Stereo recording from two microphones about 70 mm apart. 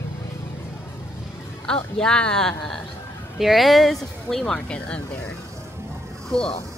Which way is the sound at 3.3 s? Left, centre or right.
Centre.